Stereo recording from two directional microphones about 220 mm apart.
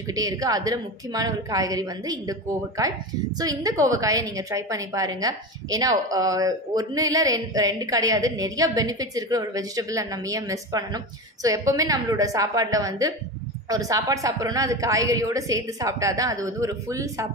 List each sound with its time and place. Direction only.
0.1 s a woman's voice: 15° right (ahead or behind)